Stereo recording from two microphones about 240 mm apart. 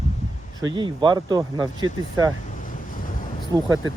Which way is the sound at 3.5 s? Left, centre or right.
Centre.